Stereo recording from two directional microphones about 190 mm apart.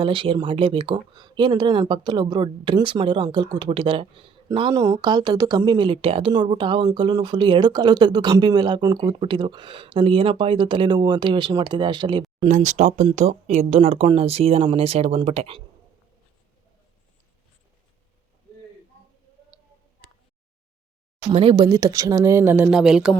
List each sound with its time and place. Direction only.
0.0 s speech: 25° right (ahead or behind)
12.4 s speech: 40° right (ahead or behind)
21.3 s speech: 25° right (ahead or behind); by 23.1 s centre (ahead or behind)